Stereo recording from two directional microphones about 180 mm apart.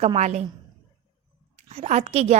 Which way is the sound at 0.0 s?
35° right (ahead or behind).